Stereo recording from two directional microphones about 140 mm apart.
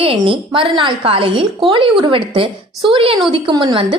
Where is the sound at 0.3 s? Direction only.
40° right (ahead or behind).